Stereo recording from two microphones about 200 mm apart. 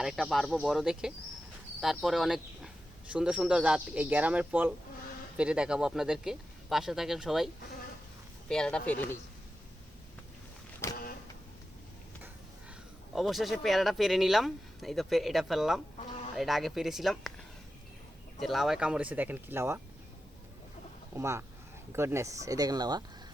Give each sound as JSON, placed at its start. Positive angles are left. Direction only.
{"t": 0.0, "sound": "speech", "side_deg": 0}
{"t": 10.8, "sound": "vehicle", "side_deg": 10}
{"t": 13.1, "sound": "speech", "side_deg": 0}
{"t": 16.0, "sound": "chicken", "side_deg": 30}
{"t": 16.3, "sound": "speech", "side_deg": 0}
{"t": 18.3, "sound": "speech", "side_deg": 0}
{"t": 21.2, "sound": "speech", "side_deg": -15}